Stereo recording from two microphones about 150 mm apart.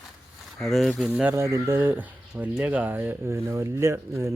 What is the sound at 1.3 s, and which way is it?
Speech, 15° right (ahead or behind).